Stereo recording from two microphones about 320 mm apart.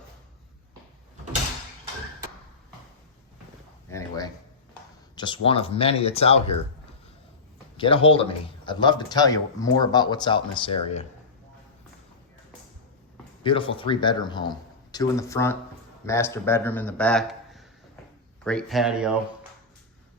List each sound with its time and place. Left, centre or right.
3.8 s a sound: centre
4.7 s speech: centre
7.8 s speech: centre
13.4 s speech: centre